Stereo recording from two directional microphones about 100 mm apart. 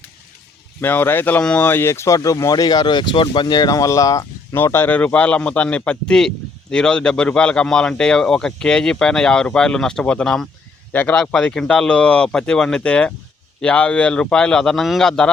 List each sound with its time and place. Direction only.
0.8 s speech: 20° left (ahead or behind)
4.5 s a man's voice: 25° left (ahead or behind); by 15.3 s 5° left (ahead or behind)